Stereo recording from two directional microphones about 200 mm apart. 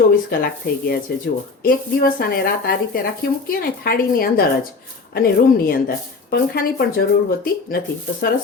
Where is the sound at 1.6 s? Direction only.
45° left (ahead or behind).